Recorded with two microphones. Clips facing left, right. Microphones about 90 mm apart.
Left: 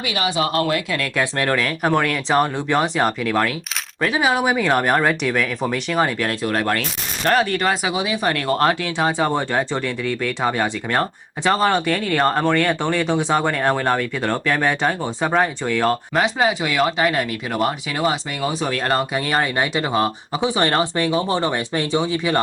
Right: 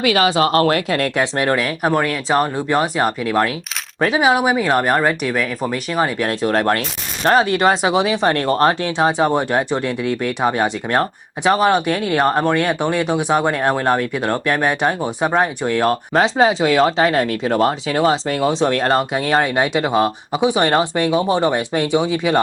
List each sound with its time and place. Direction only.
0.0 s speech: 70° right (ahead or behind)
0.3 s speech: 50° right (ahead or behind)
1.1 s speech: 20° right (ahead or behind)
4.1 s speech: 20° right (ahead or behind)
6.1 s speech: 20° right (ahead or behind)